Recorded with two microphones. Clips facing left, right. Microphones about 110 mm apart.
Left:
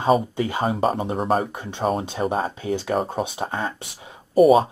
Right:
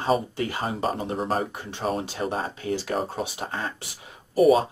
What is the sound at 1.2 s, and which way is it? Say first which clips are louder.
Speech: left 6 dB; 30° left (ahead or behind).